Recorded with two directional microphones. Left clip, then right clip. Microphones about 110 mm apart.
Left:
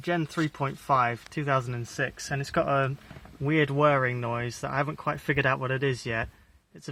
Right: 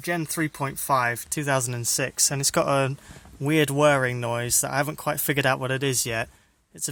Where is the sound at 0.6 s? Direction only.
35° right (ahead or behind); by 2.9 s 65° right (ahead or behind).